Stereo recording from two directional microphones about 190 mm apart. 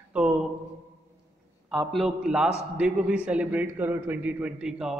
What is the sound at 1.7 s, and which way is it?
A man's voice, centre (ahead or behind).